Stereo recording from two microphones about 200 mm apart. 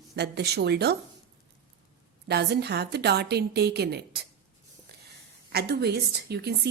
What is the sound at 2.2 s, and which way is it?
A woman's voice, 55° right (ahead or behind).